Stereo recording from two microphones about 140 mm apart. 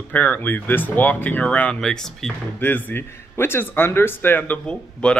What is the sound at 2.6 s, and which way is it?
A man's voice, 15° left (ahead or behind).